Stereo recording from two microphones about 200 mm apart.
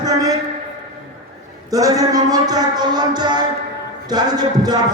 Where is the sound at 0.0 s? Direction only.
20° right (ahead or behind).